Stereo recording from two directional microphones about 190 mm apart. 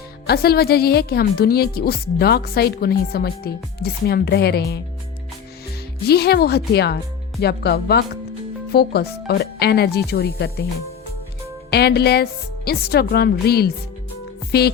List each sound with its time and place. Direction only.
0.3 s a woman's voice: 55° left (ahead or behind)
6.1 s a woman's voice: 55° left (ahead or behind)
11.7 s a woman's voice: 60° left (ahead or behind)